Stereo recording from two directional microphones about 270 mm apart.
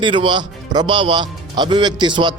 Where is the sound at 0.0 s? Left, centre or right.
Centre.